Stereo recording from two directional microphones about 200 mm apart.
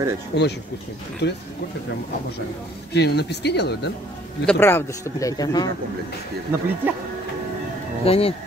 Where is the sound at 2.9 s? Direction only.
55° left (ahead or behind).